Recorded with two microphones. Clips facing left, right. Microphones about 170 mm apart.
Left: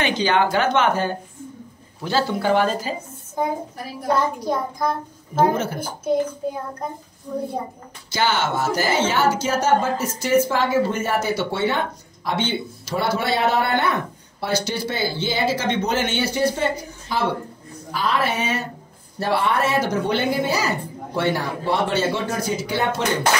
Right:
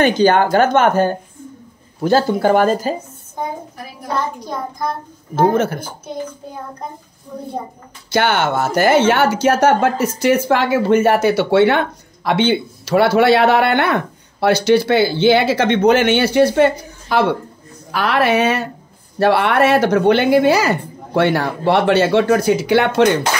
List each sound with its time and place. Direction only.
0.0 s speech: 45° right (ahead or behind)
5.3 s speech: 65° right (ahead or behind)
8.1 s speech: 60° right (ahead or behind)